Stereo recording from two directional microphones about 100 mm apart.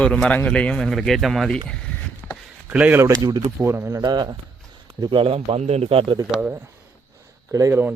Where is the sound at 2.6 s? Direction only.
15° right (ahead or behind).